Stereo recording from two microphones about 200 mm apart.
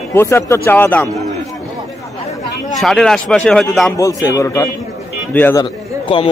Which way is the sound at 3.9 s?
15° left (ahead or behind).